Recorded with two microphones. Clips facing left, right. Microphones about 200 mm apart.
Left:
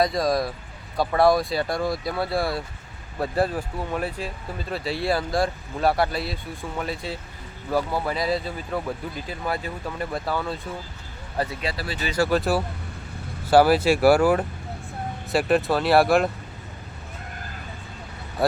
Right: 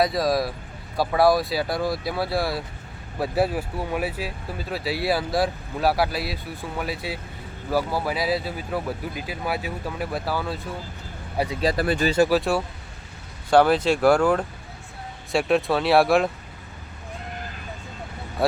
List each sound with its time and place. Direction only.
0.0 s speech: 5° right (ahead or behind)
11.6 s speech: 50° right (ahead or behind)
12.3 s speech: centre (ahead or behind)